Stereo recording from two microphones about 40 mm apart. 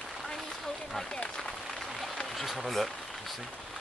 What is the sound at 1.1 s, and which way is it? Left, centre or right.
Speech, left.